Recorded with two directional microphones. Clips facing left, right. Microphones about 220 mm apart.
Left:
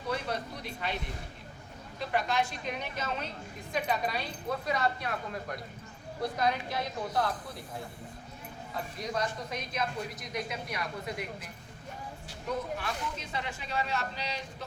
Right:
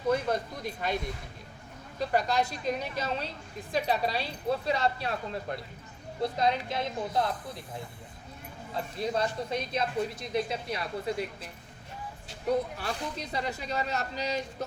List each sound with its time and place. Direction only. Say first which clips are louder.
0.1 s a sound: right 6 dB; 45° right (ahead or behind)
2.0 s speech: right 3 dB; 40° right (ahead or behind)
9.0 s speech: right 5 dB; 30° right (ahead or behind)
12.8 s speech: right 2 dB; 40° right (ahead or behind)